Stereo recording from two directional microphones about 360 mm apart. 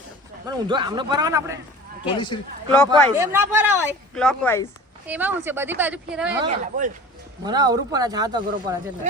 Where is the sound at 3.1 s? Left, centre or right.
Centre.